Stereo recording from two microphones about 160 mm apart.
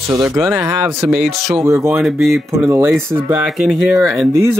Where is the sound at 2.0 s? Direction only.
Centre (ahead or behind).